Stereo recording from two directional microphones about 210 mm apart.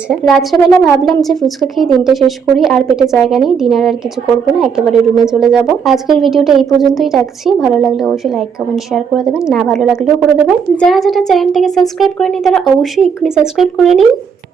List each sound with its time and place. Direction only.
0.1 s a woman's voice: centre (ahead or behind)
5.2 s a woman's voice: centre (ahead or behind)